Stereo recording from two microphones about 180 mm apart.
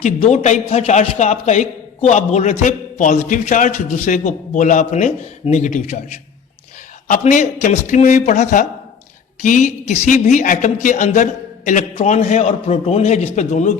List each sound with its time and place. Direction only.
0.0 s a man's voice: 40° left (ahead or behind)